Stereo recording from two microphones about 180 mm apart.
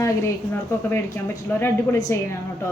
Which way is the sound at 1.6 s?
15° left (ahead or behind).